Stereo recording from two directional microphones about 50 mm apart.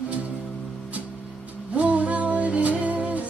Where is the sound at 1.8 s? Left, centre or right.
Right.